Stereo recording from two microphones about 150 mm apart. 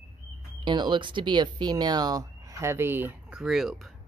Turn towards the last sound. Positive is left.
turn(degrees=0)  # may be behind; listen again after turning